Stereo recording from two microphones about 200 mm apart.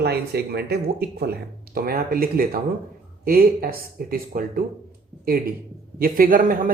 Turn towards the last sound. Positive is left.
turn(degrees=-45)  # may be behind; listen again after turning